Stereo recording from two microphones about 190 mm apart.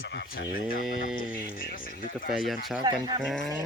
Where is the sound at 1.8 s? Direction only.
50° left (ahead or behind).